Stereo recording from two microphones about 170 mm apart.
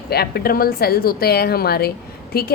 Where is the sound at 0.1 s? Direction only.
65° left (ahead or behind).